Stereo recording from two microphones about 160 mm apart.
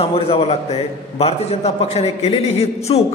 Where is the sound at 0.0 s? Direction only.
35° left (ahead or behind).